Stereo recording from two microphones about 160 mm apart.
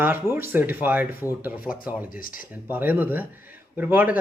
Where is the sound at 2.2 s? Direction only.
60° left (ahead or behind).